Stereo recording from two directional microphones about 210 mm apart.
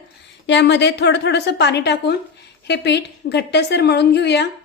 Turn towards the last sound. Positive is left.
turn(degrees=55)  # may be behind; listen again after turning